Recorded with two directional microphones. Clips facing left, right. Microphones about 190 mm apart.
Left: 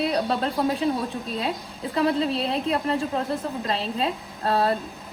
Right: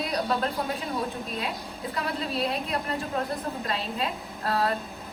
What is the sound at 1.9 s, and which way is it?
A woman's voice, 30° left (ahead or behind).